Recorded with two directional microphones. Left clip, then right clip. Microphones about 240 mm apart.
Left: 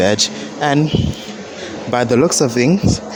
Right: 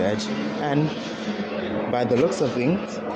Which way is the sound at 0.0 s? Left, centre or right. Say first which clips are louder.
Left 9 dB; left.